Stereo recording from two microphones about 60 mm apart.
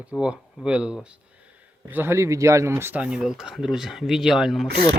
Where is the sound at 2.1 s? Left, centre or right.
Right.